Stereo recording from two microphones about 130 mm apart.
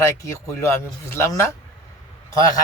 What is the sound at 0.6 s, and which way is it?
Speech, 20° left (ahead or behind).